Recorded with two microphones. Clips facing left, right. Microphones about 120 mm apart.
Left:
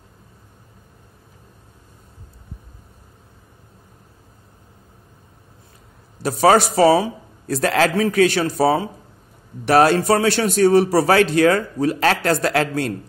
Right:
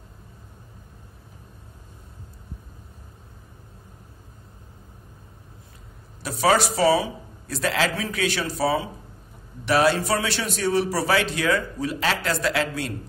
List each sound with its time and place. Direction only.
6.2 s a man's voice: 45° left (ahead or behind)